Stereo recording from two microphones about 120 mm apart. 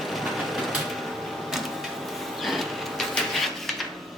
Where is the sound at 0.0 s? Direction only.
Centre (ahead or behind).